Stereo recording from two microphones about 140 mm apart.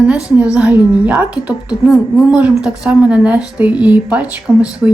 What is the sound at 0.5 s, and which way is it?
A woman's voice, 10° right (ahead or behind).